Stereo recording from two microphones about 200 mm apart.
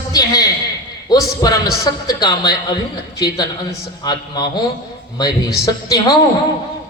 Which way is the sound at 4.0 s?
20° left (ahead or behind).